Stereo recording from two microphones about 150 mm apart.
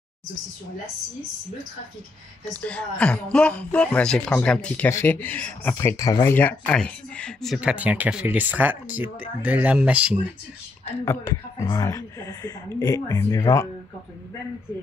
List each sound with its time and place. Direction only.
2.6 s speech: 10° left (ahead or behind); by 10.1 s 10° right (ahead or behind)
11.1 s speech: 20° left (ahead or behind)